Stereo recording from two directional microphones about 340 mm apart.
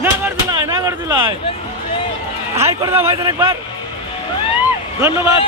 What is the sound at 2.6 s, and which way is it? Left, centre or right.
Speech, centre.